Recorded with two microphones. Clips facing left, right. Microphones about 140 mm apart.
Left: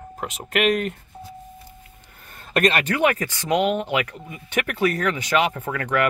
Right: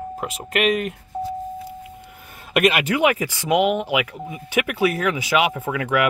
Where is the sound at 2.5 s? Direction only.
10° right (ahead or behind).